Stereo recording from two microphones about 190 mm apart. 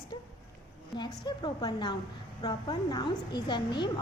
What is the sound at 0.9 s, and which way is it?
Speech, 25° left (ahead or behind).